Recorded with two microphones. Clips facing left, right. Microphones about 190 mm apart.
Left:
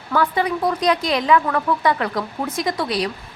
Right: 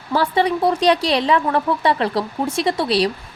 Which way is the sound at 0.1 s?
30° right (ahead or behind).